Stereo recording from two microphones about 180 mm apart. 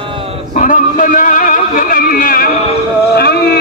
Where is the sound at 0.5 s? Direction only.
45° left (ahead or behind); by 3.6 s 60° left (ahead or behind).